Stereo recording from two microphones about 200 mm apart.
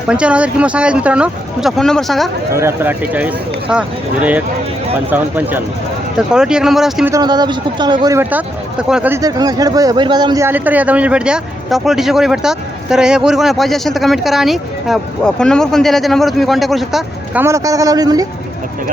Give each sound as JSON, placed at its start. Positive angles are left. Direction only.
{"t": 0.1, "sound": "speech", "side_deg": -5}
{"t": 2.6, "sound": "speech", "side_deg": -10}
{"t": 7.1, "sound": "speech", "side_deg": -20}
{"t": 17.4, "sound": "speech", "side_deg": -15}